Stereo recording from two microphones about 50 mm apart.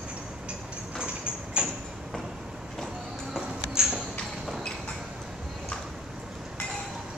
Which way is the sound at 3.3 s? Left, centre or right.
Centre.